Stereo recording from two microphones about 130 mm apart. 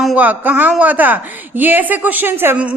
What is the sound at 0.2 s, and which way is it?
A woman's voice, 15° right (ahead or behind).